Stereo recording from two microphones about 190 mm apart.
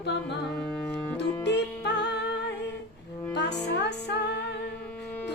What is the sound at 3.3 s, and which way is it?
Music, 65° left (ahead or behind).